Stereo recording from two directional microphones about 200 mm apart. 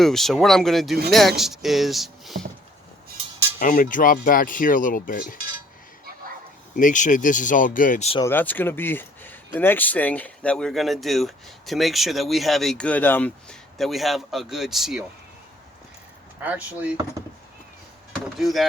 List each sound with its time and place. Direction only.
0.0 s speech: centre (ahead or behind)
3.6 s speech: 40° left (ahead or behind)
6.7 s speech: 40° left (ahead or behind)
8.2 s speech: 10° left (ahead or behind)
16.4 s speech: 10° right (ahead or behind)
18.3 s speech: centre (ahead or behind)